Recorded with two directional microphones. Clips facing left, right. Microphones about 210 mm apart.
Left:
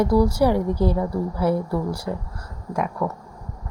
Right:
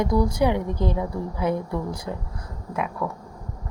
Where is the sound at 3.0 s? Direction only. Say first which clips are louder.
Left 4 dB; 15° left (ahead or behind).